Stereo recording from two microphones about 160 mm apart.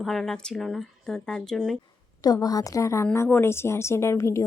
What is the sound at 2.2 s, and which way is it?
A woman's voice, 25° left (ahead or behind).